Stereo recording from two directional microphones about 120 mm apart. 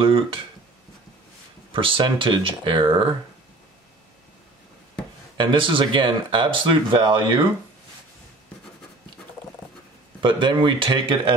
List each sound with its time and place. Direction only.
0.0 s speech: 45° right (ahead or behind)
1.7 s speech: 45° right (ahead or behind)
5.4 s speech: 45° right (ahead or behind)
10.2 s speech: 40° right (ahead or behind)